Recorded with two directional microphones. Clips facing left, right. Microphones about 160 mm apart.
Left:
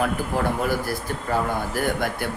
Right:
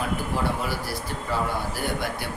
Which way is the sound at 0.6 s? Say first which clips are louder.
Left 5 dB; 50° left (ahead or behind).